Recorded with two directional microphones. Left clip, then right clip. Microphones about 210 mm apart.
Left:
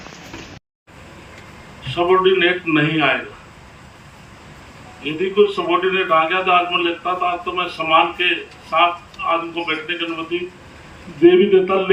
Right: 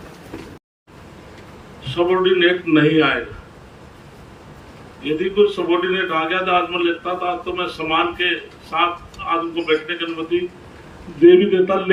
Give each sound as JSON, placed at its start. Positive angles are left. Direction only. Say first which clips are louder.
{"t": 1.8, "sound": "a man's voice", "louder": "left 2 dB", "side_deg": -15}
{"t": 5.0, "sound": "a man's voice", "louder": "even", "side_deg": -15}